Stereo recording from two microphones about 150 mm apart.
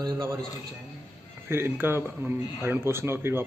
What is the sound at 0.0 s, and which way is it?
Speech, 20° right (ahead or behind).